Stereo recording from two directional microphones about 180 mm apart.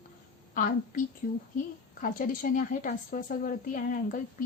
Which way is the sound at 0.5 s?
45° left (ahead or behind).